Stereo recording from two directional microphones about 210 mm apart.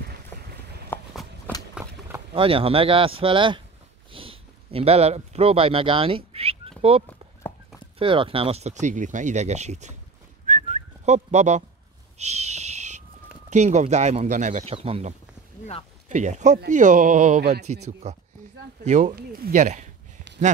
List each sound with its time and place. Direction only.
0.9 s walk: 10° left (ahead or behind)
2.3 s speech: 25° right (ahead or behind)
7.1 s clip-clop: 5° left (ahead or behind)
8.0 s speech: 25° right (ahead or behind)
10.4 s whistling: 35° right (ahead or behind)
12.2 s a sound: 30° right (ahead or behind)
13.5 s speech: 35° right (ahead or behind)